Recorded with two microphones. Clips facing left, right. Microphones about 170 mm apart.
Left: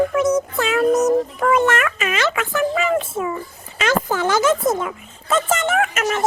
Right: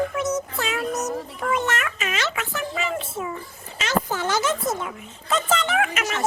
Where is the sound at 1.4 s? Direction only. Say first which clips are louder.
Left 8 dB; 90° left.